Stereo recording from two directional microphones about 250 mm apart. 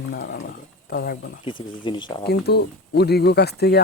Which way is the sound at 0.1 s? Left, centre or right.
Left.